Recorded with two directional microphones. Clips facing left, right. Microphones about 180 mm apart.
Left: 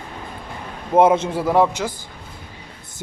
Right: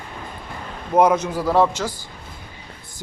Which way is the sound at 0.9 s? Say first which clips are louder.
Left 2 dB; 25° left (ahead or behind).